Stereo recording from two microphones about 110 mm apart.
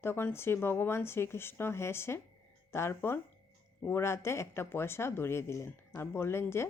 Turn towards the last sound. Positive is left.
turn(degrees=25)  # may be behind; listen again after turning